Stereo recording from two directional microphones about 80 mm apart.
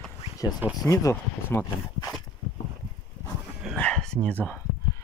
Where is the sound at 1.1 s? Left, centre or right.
Left.